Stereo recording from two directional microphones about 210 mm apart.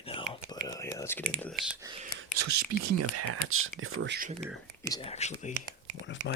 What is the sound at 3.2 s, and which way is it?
Speech, 85° right.